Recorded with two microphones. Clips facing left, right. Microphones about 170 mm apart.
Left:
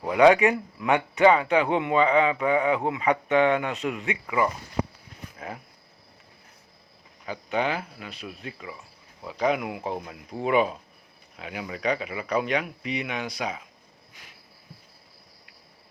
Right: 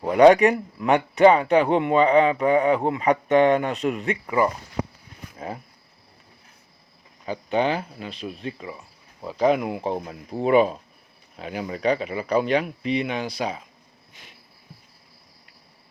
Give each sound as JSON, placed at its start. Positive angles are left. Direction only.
{"t": 0.1, "sound": "speech", "side_deg": -35}
{"t": 7.3, "sound": "speech", "side_deg": -30}
{"t": 14.1, "sound": "cricket", "side_deg": -25}